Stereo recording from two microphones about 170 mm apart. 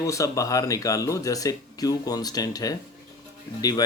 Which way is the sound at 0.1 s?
20° left (ahead or behind).